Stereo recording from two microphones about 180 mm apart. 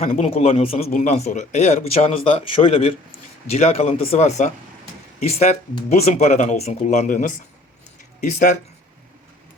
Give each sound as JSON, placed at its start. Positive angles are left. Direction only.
{"t": 0.0, "sound": "speech", "side_deg": 35}